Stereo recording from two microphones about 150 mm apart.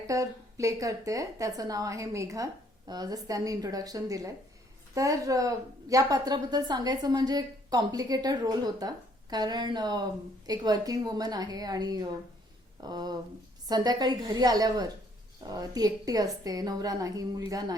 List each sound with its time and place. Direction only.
0.1 s a woman's voice: 20° right (ahead or behind)